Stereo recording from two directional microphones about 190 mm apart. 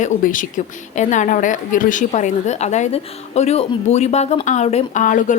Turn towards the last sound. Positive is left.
turn(degrees=40)  # may be behind; listen again after turning